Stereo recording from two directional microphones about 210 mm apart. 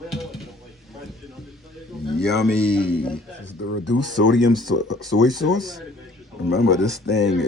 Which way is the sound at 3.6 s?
70° left (ahead or behind).